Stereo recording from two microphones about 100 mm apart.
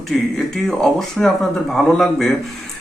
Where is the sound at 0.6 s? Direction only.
5° left (ahead or behind).